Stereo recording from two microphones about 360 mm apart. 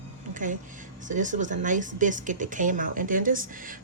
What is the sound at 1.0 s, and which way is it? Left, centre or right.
Speech, right.